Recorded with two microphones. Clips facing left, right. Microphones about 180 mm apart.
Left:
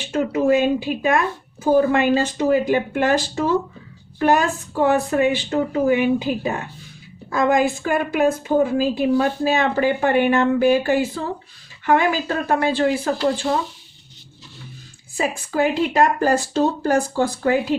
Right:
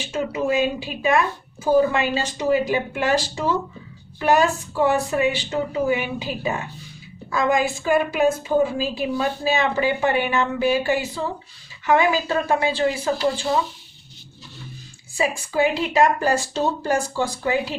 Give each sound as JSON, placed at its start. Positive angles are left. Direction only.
{"t": 0.1, "sound": "a woman's voice", "side_deg": 55}
{"t": 15.2, "sound": "a woman's voice", "side_deg": 50}